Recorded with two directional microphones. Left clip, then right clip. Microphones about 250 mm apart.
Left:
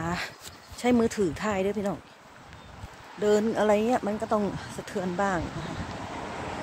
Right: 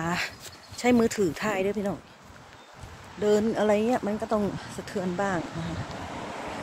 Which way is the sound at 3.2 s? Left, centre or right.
Centre.